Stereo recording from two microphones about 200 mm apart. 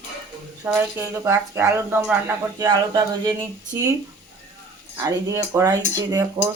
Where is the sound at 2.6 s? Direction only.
20° right (ahead or behind).